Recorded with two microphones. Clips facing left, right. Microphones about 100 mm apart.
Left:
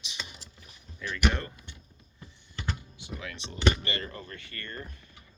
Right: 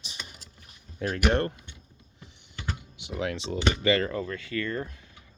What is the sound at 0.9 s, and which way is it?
Speech, 50° right (ahead or behind).